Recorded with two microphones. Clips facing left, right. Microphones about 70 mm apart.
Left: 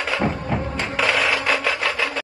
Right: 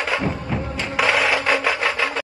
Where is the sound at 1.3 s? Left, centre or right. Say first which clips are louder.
Right 2 dB; right.